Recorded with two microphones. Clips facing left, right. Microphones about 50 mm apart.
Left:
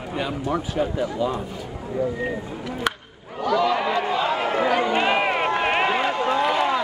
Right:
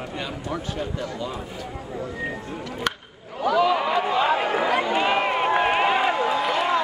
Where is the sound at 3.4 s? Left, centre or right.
Centre.